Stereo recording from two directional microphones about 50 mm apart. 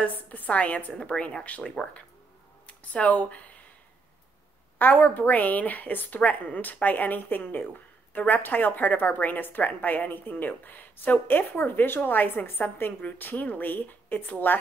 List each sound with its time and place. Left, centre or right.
0.0 s a woman's voice: left
4.7 s a woman's voice: left